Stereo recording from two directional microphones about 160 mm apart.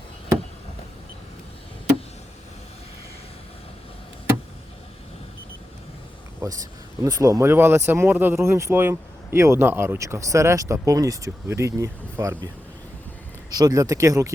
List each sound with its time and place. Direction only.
6.4 s speech: 20° right (ahead or behind)
13.5 s speech: 25° right (ahead or behind)